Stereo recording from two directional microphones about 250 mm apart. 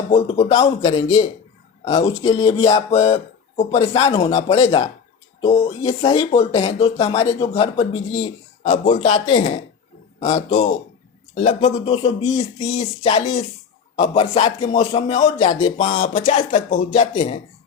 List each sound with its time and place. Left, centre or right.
0.1 s speech: left